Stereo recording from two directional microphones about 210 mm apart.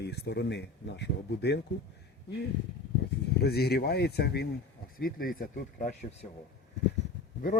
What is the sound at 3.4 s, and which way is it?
Speech, 50° left (ahead or behind).